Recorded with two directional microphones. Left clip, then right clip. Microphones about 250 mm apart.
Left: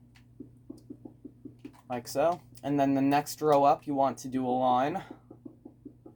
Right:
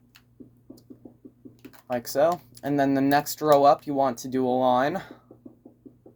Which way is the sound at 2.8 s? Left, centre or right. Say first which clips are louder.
Right 3 dB; centre.